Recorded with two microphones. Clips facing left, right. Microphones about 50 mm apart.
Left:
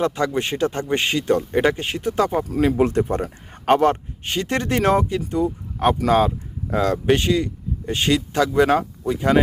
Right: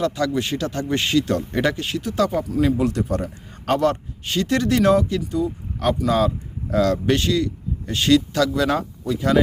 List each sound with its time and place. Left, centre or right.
0.0 s speech: left